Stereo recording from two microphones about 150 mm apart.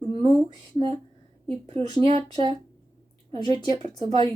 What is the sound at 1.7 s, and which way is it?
Speech, 40° right (ahead or behind).